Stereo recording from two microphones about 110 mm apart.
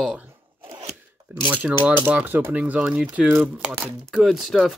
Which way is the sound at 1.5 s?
15° right (ahead or behind).